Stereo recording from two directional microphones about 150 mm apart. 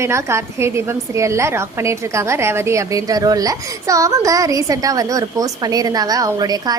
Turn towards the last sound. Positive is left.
turn(degrees=-25)  # may be behind; listen again after turning